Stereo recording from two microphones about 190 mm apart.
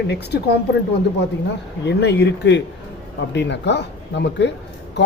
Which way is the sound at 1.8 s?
65° left (ahead or behind).